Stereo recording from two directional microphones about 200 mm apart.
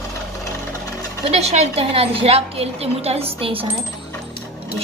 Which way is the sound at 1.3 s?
30° right (ahead or behind).